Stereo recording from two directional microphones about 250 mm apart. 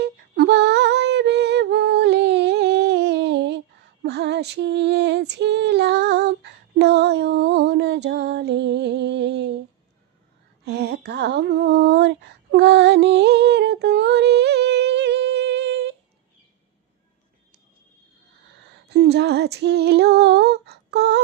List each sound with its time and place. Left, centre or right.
0.0 s female singing: right
10.7 s a sound: right
18.9 s female singing: right